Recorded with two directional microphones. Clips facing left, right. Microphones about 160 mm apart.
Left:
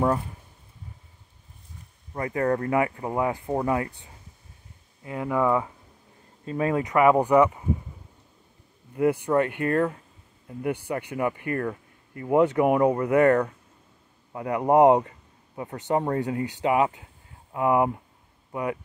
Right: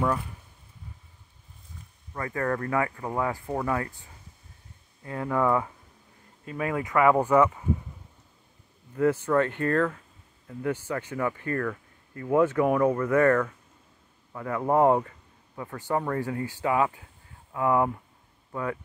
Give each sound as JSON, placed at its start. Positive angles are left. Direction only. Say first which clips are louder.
{"t": 2.1, "sound": "speech", "louder": "left 4 dB", "side_deg": 20}
{"t": 5.0, "sound": "speech", "louder": "left 1 dB", "side_deg": 15}
{"t": 6.4, "sound": "speech", "louder": "left 4 dB", "side_deg": 30}
{"t": 8.9, "sound": "speech", "louder": "left 1 dB", "side_deg": 15}